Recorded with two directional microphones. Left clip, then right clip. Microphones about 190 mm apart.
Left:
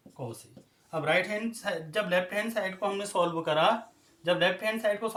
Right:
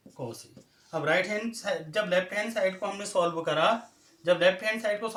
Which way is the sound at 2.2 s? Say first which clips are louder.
Right 3 dB; 50° left (ahead or behind).